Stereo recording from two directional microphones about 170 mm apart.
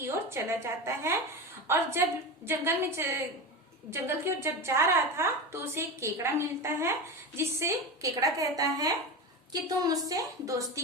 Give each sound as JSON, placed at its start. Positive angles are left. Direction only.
{"t": 0.0, "sound": "a woman's voice", "side_deg": -15}